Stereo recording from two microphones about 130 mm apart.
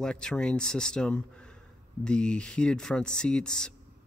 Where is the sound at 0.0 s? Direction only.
5° left (ahead or behind).